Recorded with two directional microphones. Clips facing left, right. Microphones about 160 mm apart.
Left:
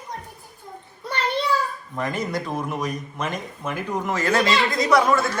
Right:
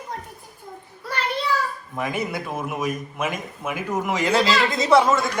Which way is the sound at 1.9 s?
10° right (ahead or behind).